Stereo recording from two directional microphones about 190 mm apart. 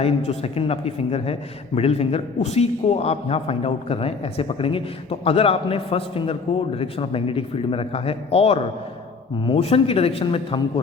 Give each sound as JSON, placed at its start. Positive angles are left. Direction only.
{"t": 0.0, "sound": "a man's voice", "side_deg": 35}